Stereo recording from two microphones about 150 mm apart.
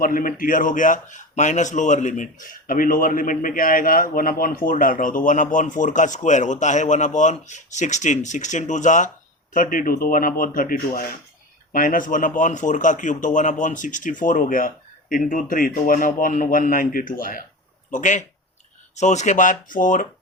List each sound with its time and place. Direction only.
0.0 s a man's voice: 65° left (ahead or behind)
17.9 s a man's voice: 55° left (ahead or behind)